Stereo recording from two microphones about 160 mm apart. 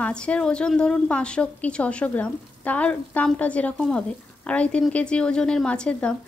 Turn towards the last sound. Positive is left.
turn(degrees=5)  # may be behind; listen again after turning